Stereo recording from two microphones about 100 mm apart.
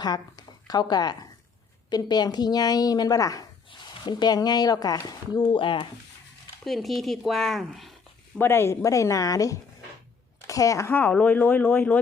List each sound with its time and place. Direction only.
0.0 s a woman's voice: 40° left (ahead or behind)
3.7 s speech: 50° left (ahead or behind)
6.7 s speech: centre (ahead or behind)
8.4 s a woman's voice: 25° left (ahead or behind)
11.1 s speech: 15° left (ahead or behind)